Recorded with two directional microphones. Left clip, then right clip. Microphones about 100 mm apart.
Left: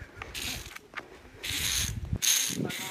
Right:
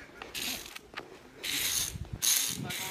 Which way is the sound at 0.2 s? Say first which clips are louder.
Even; centre (ahead or behind).